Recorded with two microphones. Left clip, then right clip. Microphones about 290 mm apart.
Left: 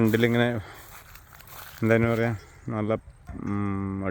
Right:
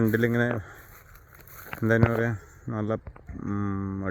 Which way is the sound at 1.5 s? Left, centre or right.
Centre.